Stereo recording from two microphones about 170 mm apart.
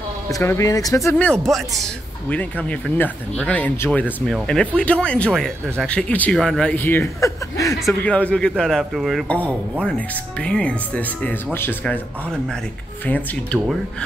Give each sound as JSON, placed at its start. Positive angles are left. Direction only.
{"t": 0.3, "sound": "speech", "side_deg": 15}
{"t": 1.1, "sound": "speech", "side_deg": 5}
{"t": 7.8, "sound": "speech", "side_deg": 5}
{"t": 13.0, "sound": "speech", "side_deg": 10}